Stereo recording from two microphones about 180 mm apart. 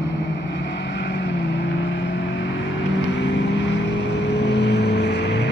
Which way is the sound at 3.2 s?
80° left.